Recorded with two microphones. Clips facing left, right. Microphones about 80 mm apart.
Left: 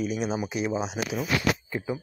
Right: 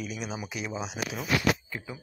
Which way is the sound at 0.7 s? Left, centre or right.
Centre.